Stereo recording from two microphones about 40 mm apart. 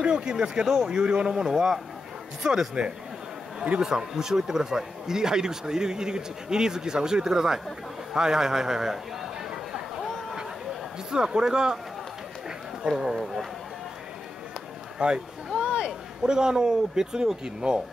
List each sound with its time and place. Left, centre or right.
0.0 s a man's voice: right
3.8 s speech: centre
11.1 s speech: centre
15.0 s a sound: right
16.2 s speech: centre